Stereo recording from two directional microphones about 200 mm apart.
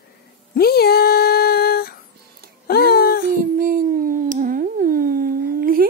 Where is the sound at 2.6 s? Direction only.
50° left (ahead or behind).